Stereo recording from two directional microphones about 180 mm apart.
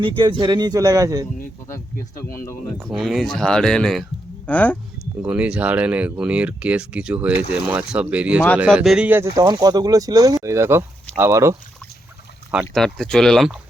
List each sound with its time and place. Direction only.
0.0 s speech: 25° right (ahead or behind)
1.6 s speech: 15° left (ahead or behind)
2.9 s speech: centre (ahead or behind)
5.2 s speech: 5° right (ahead or behind)
12.5 s speech: centre (ahead or behind)